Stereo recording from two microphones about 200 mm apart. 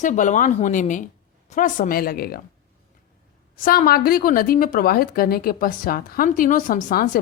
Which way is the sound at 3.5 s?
45° left (ahead or behind).